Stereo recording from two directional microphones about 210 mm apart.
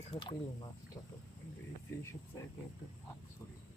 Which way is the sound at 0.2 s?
25° left (ahead or behind).